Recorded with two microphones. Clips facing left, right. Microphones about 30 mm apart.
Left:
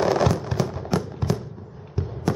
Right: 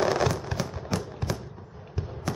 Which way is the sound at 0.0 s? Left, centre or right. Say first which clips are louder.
Left 4 dB; centre.